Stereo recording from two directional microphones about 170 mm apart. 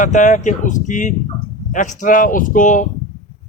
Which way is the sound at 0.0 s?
50° left (ahead or behind).